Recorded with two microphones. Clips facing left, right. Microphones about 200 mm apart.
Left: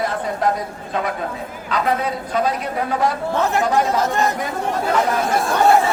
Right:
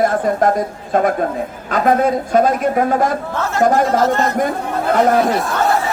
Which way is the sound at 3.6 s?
50° right (ahead or behind).